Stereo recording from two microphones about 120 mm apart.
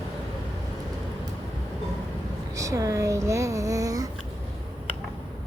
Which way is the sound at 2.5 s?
25° right (ahead or behind).